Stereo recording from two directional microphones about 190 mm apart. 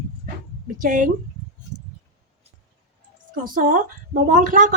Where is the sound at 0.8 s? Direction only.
45° right (ahead or behind).